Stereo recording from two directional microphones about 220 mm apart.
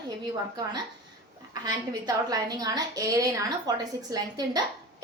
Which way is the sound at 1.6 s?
15° right (ahead or behind).